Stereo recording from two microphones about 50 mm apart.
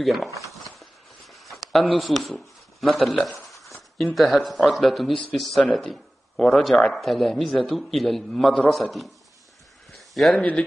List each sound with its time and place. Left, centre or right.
0.0 s a man's voice: centre
0.3 s speech: right
0.7 s writing: centre
4.1 s a man's voice: centre
9.8 s a sound: centre
10.3 s speech: left